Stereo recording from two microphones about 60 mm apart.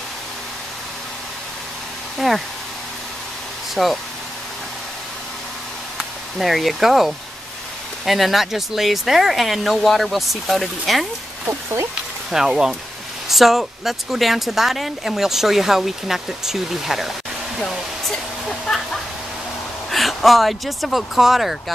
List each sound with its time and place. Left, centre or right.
2.1 s speech: centre
3.7 s speech: centre
5.9 s speech: centre
11.4 s speech: right
12.3 s speech: centre